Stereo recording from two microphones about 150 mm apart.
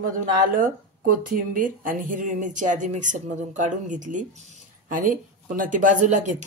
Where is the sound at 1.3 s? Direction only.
65° right (ahead or behind).